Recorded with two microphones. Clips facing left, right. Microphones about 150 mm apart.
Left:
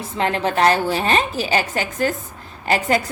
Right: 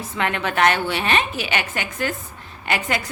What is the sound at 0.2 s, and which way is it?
A woman's voice, 30° left (ahead or behind).